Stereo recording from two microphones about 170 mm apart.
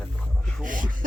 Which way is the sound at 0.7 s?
50° right (ahead or behind).